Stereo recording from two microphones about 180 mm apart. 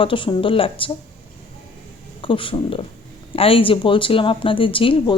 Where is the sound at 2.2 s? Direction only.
30° left (ahead or behind).